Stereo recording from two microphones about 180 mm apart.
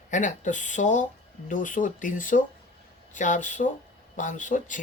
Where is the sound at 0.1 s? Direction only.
45° left (ahead or behind).